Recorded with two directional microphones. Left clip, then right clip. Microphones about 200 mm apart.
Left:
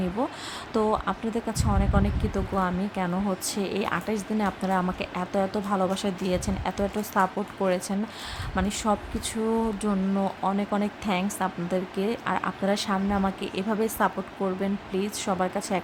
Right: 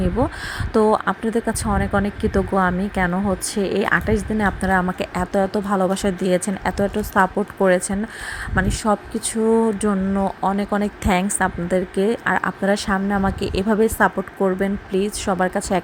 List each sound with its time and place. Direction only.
0.2 s speech: 20° right (ahead or behind)